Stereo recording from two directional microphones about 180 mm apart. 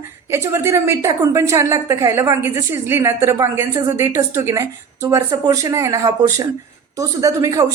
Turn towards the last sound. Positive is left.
turn(degrees=-20)  # may be behind; listen again after turning